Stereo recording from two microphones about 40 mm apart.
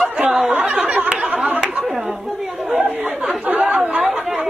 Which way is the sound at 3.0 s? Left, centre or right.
Centre.